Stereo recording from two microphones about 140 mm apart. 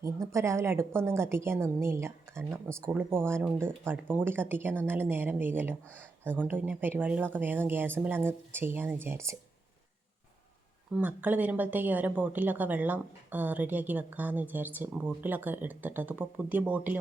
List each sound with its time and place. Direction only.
0.0 s a woman's voice: 20° right (ahead or behind)
10.9 s speech: 10° right (ahead or behind)